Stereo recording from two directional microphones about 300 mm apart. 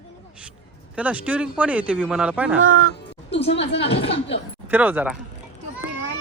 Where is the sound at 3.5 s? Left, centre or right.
Left.